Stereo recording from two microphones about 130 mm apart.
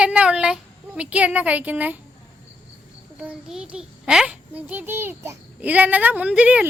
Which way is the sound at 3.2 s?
5° right (ahead or behind).